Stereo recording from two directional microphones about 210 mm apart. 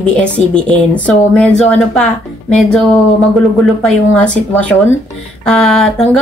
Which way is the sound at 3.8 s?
5° left (ahead or behind).